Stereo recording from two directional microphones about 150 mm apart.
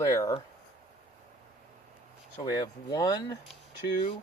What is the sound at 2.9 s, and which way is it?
Speech, 25° left (ahead or behind).